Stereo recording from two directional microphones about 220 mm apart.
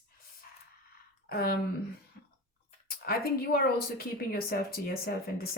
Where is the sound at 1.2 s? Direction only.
45° left (ahead or behind).